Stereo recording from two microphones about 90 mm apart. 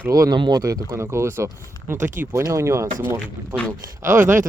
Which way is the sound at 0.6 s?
40° right (ahead or behind).